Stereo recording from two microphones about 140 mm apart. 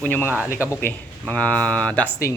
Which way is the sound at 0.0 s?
15° left (ahead or behind).